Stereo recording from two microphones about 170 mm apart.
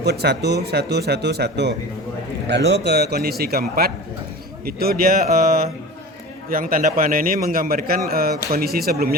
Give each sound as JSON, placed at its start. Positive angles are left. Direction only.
{"t": 0.0, "sound": "a man's voice", "side_deg": -75}